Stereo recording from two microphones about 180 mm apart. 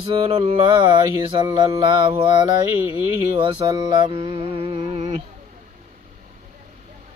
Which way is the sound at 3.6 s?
25° right (ahead or behind).